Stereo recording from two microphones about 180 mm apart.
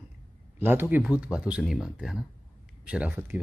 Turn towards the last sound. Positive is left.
turn(degrees=-5)  # may be behind; listen again after turning